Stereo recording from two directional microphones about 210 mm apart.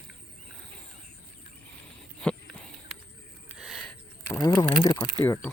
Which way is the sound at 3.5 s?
Centre (ahead or behind).